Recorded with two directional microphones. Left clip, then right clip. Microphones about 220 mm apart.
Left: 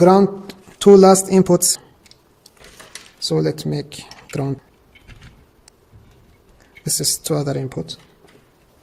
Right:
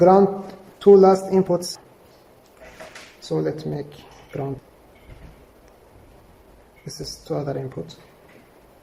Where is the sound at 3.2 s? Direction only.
55° left (ahead or behind).